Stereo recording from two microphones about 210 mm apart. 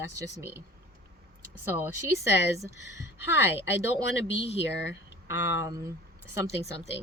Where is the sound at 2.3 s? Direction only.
55° left (ahead or behind).